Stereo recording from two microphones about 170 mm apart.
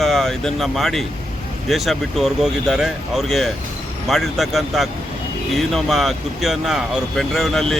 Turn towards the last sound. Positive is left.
turn(degrees=0)  # may be behind; listen again after turning